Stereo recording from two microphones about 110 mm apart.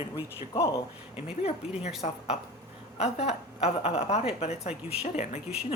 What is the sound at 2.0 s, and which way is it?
A woman's voice, 75° left (ahead or behind).